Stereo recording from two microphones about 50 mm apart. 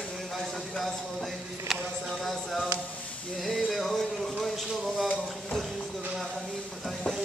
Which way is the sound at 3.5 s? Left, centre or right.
Centre.